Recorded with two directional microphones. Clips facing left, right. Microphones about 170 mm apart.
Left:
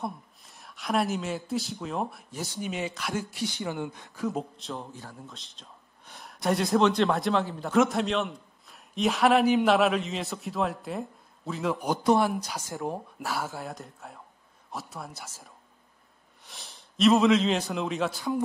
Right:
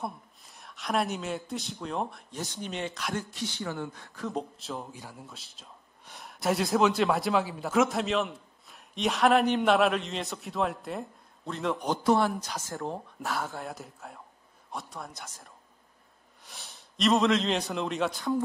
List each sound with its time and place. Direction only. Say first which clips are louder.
0.0 s a man's voice: left 2 dB; centre (ahead or behind); by 4.2 s 15° left (ahead or behind)
4.2 s a man's voice: left 3 dB; centre (ahead or behind)
12.0 s a man's voice: left 2 dB; 15° left (ahead or behind); by 18.3 s centre (ahead or behind)